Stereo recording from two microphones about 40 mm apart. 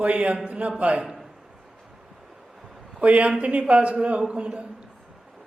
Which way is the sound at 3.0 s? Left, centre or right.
Right.